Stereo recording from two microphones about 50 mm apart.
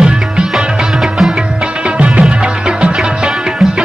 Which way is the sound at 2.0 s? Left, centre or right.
Right.